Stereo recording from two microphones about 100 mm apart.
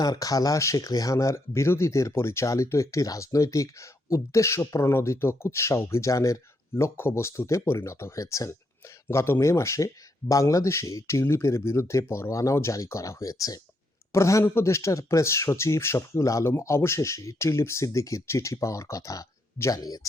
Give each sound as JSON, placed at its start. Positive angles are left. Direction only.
{"t": 0.0, "sound": "speech", "side_deg": 40}